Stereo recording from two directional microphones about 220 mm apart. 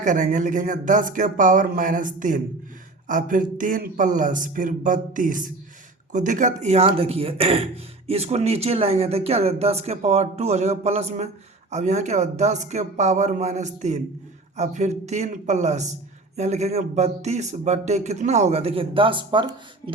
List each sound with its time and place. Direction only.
0.0 s speech: 35° right (ahead or behind)